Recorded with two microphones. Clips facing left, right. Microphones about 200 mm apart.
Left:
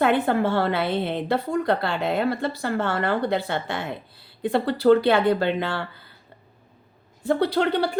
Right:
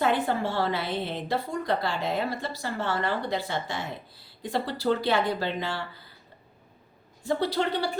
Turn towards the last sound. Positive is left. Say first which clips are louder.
# left 5 dB
turn(degrees=60)  # may be behind; listen again after turning